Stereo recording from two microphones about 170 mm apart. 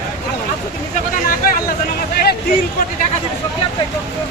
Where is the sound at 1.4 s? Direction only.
60° left (ahead or behind).